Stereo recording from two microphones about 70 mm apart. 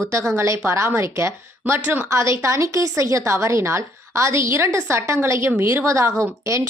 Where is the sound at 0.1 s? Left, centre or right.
Right.